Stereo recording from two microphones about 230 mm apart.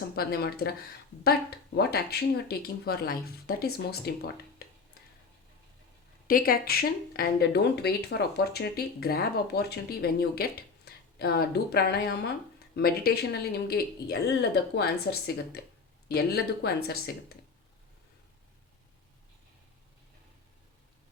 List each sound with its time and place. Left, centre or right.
0.2 s speech: left
6.2 s speech: left